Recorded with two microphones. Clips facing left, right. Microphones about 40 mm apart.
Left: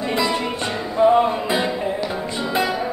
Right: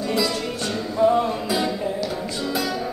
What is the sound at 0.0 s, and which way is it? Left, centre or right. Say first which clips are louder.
Music: left 2 dB; left.